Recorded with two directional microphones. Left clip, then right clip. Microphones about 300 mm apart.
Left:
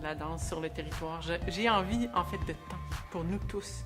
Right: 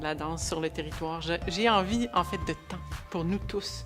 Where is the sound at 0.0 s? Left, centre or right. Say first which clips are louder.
Right 5 dB; right.